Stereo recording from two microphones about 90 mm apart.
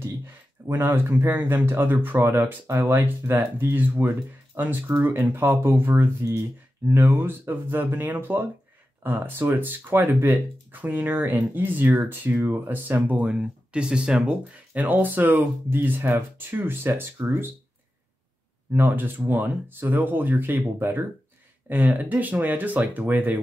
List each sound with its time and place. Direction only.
0.7 s speech: 25° right (ahead or behind)
18.7 s speech: 20° right (ahead or behind)